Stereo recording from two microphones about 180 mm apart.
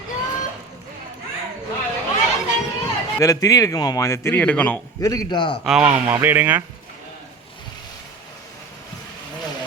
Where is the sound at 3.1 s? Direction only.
20° left (ahead or behind).